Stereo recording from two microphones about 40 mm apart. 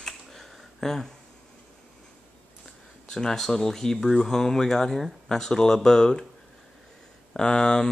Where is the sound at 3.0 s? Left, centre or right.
Centre.